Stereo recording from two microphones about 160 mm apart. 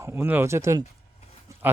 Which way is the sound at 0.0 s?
15° right (ahead or behind).